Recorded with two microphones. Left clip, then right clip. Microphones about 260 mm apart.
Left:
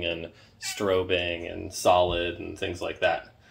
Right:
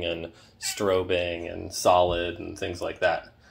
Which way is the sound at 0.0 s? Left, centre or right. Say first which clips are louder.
Even; centre.